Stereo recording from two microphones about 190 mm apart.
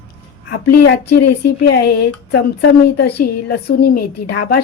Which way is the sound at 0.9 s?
60° left (ahead or behind).